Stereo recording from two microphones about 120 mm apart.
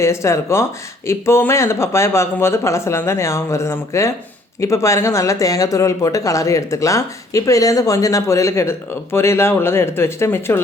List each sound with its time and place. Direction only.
0.0 s speech: 25° left (ahead or behind)